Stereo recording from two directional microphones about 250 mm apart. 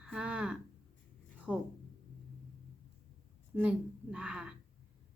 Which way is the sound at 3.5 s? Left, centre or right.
Centre.